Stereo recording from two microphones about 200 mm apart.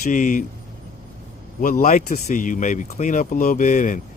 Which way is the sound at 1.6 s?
45° left (ahead or behind).